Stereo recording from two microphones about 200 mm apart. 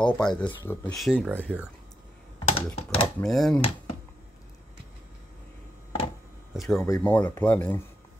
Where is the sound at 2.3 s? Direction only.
30° left (ahead or behind).